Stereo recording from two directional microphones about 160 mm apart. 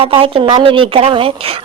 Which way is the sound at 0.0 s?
35° right (ahead or behind).